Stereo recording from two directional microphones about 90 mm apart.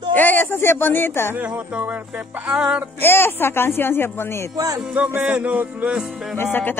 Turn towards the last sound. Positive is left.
turn(degrees=20)  # may be behind; listen again after turning